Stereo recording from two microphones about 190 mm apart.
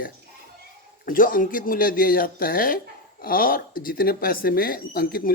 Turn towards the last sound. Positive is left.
turn(degrees=50)  # may be behind; listen again after turning